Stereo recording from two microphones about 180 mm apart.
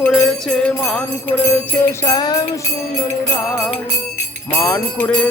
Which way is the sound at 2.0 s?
20° left (ahead or behind).